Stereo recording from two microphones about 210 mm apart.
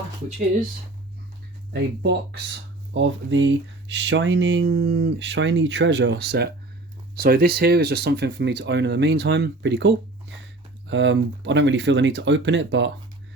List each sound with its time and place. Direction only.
1.7 s speech: 50° right (ahead or behind)